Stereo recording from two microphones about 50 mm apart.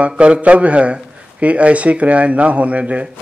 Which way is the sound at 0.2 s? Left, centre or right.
Right.